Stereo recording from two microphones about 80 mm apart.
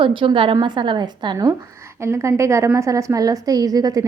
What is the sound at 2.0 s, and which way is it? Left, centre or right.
A woman's voice, right.